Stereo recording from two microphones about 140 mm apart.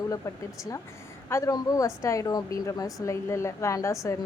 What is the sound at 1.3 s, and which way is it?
Speech, 25° left (ahead or behind).